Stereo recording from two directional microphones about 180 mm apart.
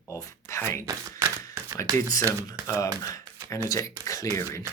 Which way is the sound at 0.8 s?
15° right (ahead or behind).